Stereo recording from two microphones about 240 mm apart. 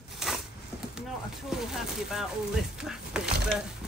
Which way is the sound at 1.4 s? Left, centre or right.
Centre.